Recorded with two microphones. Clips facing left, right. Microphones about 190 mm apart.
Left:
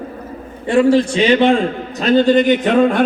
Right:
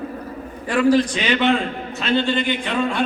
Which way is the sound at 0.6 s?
25° left (ahead or behind).